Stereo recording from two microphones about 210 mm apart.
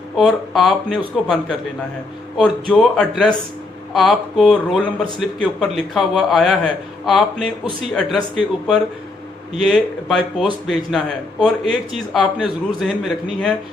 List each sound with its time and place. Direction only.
0.1 s a man's voice: centre (ahead or behind)
9.6 s a man's voice: centre (ahead or behind)